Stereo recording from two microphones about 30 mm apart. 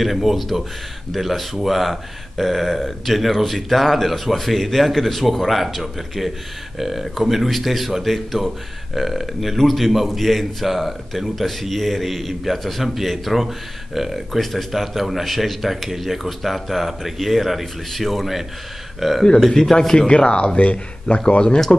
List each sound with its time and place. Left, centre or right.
0.0 s speech: centre
19.8 s speech: centre
20.1 s speech: left